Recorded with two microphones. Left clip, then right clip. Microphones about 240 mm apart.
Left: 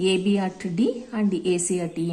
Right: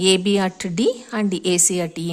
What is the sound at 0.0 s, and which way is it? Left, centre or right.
A woman's voice, right.